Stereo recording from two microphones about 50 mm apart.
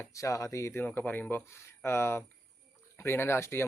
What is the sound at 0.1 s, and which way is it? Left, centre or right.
Speech, left.